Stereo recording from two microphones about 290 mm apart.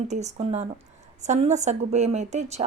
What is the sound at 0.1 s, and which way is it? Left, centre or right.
Speech, right.